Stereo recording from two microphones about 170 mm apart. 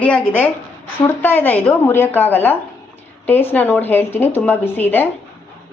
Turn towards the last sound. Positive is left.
turn(degrees=10)  # may be behind; listen again after turning